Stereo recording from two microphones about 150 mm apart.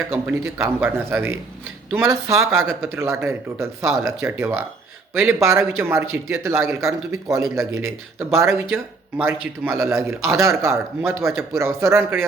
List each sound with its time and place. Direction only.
0.3 s a man's voice: 15° right (ahead or behind)
2.5 s speech: centre (ahead or behind)
2.8 s a man's voice: 15° right (ahead or behind)